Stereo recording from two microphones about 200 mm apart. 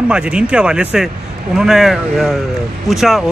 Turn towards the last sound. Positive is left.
turn(degrees=0)  # may be behind; listen again after turning